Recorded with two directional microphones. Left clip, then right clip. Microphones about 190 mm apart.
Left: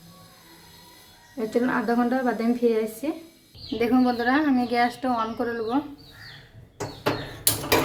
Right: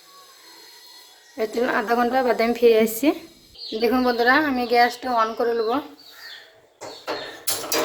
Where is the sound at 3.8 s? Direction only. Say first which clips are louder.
Right 3 dB; 30° right (ahead or behind).